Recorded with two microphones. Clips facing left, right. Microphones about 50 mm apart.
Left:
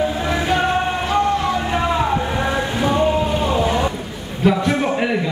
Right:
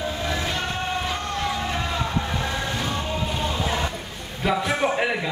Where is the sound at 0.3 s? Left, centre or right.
Left.